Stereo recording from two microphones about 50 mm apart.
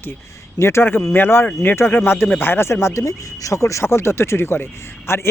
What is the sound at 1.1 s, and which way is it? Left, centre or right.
Speech, left.